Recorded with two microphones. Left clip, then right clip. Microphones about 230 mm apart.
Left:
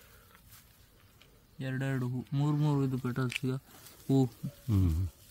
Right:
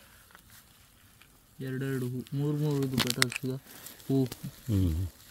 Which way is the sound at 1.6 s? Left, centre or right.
Left.